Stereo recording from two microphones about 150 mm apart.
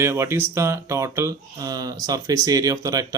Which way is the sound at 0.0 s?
15° right (ahead or behind).